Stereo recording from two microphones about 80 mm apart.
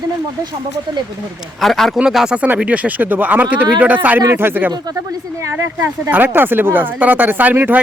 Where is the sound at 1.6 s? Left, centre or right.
Centre.